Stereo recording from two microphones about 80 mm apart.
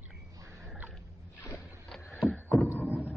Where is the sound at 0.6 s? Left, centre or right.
Right.